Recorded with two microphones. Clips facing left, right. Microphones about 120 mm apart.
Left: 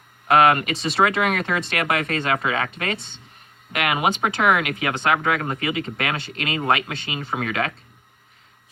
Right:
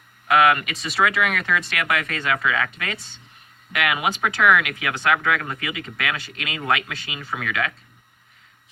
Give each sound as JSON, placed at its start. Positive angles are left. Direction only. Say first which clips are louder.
{"t": 0.3, "sound": "speech", "louder": "left 2 dB", "side_deg": 35}